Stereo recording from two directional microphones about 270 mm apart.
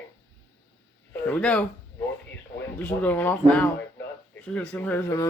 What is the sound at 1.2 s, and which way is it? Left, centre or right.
Speech, centre.